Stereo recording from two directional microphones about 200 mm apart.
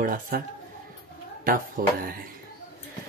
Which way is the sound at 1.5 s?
45° right (ahead or behind).